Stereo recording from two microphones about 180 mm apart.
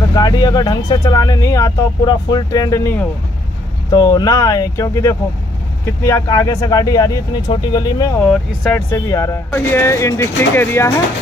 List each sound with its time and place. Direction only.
0.1 s speech: 25° left (ahead or behind)
8.2 s speech: 5° left (ahead or behind)
8.9 s speech: 15° left (ahead or behind)